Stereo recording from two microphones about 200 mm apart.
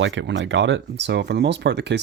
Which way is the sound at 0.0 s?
70° right (ahead or behind).